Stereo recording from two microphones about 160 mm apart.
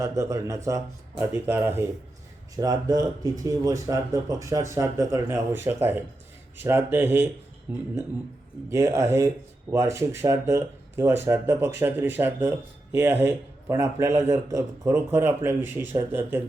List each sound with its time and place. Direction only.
0.0 s speech: 20° right (ahead or behind)
8.7 s speech: 20° right (ahead or behind)